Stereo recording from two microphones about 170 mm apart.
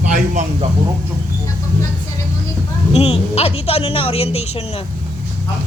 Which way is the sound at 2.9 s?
35° left (ahead or behind).